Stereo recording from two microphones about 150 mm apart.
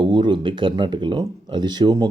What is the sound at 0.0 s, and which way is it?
Speech, 35° right (ahead or behind).